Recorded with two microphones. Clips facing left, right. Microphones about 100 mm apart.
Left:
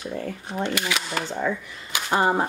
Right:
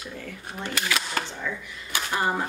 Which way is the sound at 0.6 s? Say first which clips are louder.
Left 4 dB; 15° left (ahead or behind).